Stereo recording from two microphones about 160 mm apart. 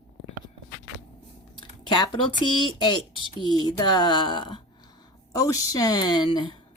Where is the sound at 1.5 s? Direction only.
30° left (ahead or behind).